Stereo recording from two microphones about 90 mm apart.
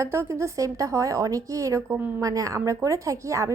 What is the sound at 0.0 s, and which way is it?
A woman's voice, 30° right (ahead or behind).